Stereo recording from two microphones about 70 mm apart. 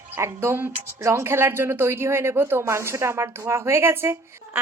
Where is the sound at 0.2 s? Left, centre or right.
Right.